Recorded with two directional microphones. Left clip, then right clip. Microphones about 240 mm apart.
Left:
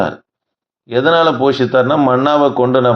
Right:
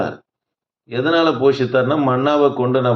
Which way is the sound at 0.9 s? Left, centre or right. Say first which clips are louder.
Left 5 dB; left.